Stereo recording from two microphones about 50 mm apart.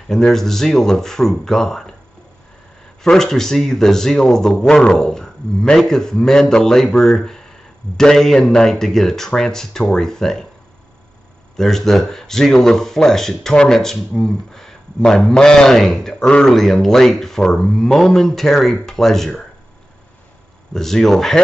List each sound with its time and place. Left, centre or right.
0.1 s a man's voice: centre
3.0 s a man's voice: centre
11.5 s a man's voice: centre
20.7 s a man's voice: centre